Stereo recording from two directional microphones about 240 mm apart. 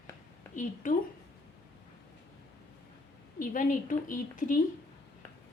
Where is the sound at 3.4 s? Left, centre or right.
Left.